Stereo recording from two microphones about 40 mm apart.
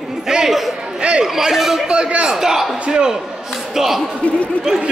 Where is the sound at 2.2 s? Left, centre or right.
Centre.